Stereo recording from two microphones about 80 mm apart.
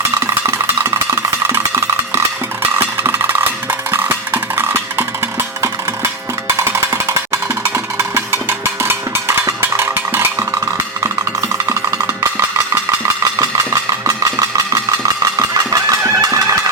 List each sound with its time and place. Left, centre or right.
0.4 s cowbell: right
2.7 s music: right
11.0 s music: right
13.4 s a sound: right